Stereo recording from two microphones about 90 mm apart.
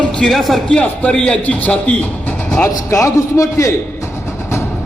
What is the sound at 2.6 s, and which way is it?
A man's voice, 35° left (ahead or behind).